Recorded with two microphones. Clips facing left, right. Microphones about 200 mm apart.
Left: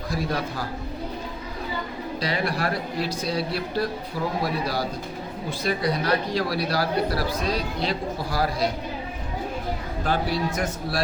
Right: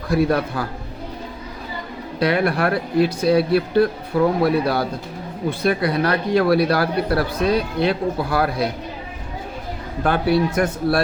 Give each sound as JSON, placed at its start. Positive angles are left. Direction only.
{"t": 0.1, "sound": "speech", "side_deg": -60}
{"t": 2.1, "sound": "speech", "side_deg": -60}
{"t": 10.0, "sound": "speech", "side_deg": -60}